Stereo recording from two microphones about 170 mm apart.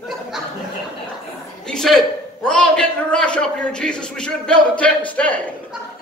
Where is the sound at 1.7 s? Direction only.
Centre (ahead or behind).